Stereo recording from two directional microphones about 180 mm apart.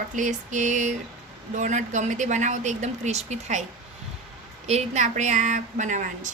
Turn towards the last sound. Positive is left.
turn(degrees=-45)  # may be behind; listen again after turning